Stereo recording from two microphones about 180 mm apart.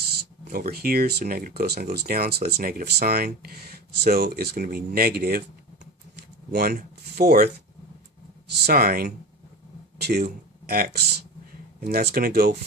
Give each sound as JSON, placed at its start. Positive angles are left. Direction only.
{"t": 0.4, "sound": "speech", "side_deg": -60}
{"t": 6.5, "sound": "speech", "side_deg": -55}
{"t": 8.6, "sound": "speech", "side_deg": -55}